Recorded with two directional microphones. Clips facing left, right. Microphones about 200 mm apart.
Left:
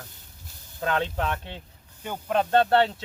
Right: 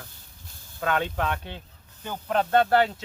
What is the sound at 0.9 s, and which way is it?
Speech, 30° left (ahead or behind).